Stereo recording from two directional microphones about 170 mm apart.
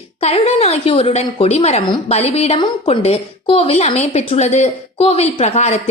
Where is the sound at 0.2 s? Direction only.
40° left (ahead or behind).